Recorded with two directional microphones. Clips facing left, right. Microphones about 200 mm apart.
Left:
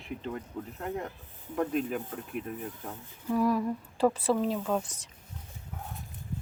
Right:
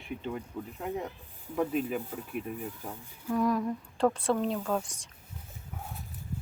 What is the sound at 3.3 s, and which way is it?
Speech, 5° left (ahead or behind).